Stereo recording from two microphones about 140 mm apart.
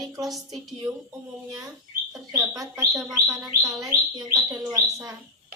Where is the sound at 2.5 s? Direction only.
25° right (ahead or behind).